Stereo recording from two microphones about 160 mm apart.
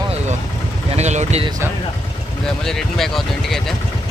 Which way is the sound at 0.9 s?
45° right (ahead or behind).